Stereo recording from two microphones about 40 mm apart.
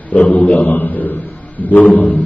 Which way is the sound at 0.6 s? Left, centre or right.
Left.